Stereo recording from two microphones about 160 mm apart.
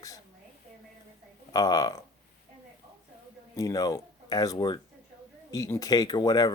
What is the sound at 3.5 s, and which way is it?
Speech, 20° left (ahead or behind).